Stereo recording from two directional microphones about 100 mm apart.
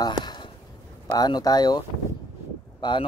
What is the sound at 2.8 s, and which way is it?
Speech, 45° left (ahead or behind).